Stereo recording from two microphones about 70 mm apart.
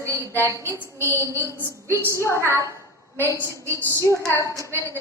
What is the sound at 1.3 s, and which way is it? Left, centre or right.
Speech, left.